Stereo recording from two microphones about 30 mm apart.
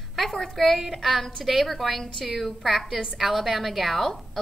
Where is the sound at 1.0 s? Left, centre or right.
Centre.